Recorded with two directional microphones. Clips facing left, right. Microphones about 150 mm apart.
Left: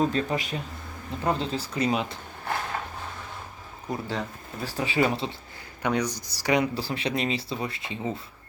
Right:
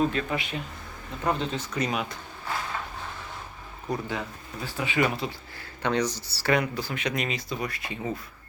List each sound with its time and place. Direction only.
0.0 s speech: 35° left (ahead or behind)
3.9 s speech: 20° left (ahead or behind)
4.6 s speech: 35° left (ahead or behind)
5.8 s speech: 10° left (ahead or behind)
6.7 s speech: 30° left (ahead or behind)